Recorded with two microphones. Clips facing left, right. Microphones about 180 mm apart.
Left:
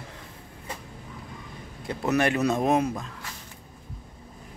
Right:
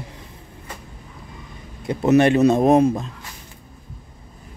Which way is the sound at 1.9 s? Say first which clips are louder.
Right 9 dB; 25° right (ahead or behind).